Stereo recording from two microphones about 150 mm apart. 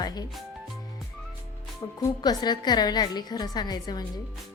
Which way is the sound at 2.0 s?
25° left (ahead or behind).